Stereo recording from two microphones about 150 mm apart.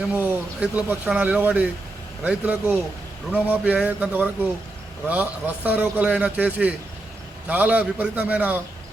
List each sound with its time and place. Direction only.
0.1 s a man's voice: 10° right (ahead or behind)